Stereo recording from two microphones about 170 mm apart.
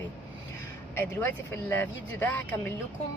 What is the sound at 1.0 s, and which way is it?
Speech, 10° left (ahead or behind).